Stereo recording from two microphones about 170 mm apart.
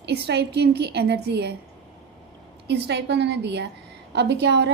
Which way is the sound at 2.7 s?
90° right.